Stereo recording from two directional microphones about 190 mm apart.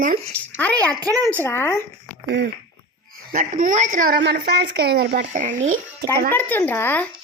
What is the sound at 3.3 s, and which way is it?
Speech, 45° right (ahead or behind).